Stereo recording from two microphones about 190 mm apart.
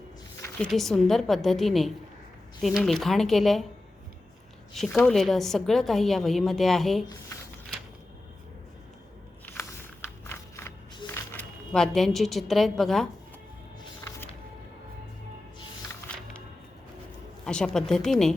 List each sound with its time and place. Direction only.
0.6 s a woman's voice: centre (ahead or behind)
4.7 s a woman's voice: centre (ahead or behind)
9.5 s walk: 10° left (ahead or behind)
11.0 s a woman's voice: 10° left (ahead or behind)
17.4 s a woman's voice: 5° left (ahead or behind)